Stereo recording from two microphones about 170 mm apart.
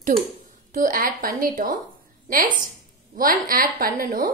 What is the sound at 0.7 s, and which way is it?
A woman's voice, 55° right (ahead or behind).